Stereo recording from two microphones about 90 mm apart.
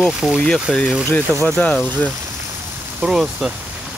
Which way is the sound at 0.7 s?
5° left (ahead or behind).